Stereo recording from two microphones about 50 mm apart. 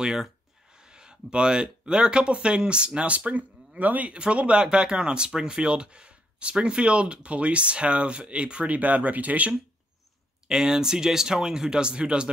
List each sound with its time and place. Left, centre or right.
0.0 s speech: centre; by 9.6 s right
10.5 s speech: centre